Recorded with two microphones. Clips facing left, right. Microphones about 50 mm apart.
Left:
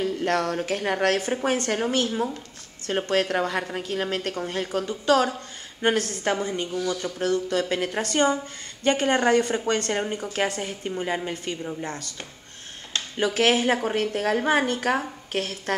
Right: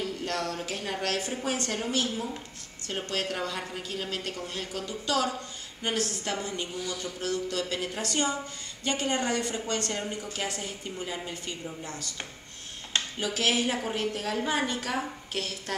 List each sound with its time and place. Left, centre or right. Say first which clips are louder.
0.0 s a woman's voice: left 8 dB; left
13.2 s a woman's voice: left 8 dB; left